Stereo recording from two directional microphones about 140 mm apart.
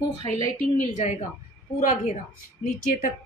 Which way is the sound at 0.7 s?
55° left (ahead or behind).